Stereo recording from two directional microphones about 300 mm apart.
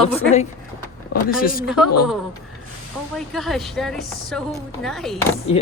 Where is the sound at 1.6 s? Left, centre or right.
Centre.